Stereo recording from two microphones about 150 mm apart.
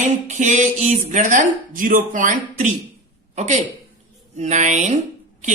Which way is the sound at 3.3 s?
50° right (ahead or behind).